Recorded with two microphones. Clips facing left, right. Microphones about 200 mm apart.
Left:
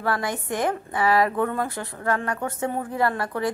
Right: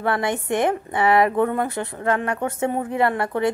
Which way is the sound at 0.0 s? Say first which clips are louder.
Right 4 dB; 25° right (ahead or behind).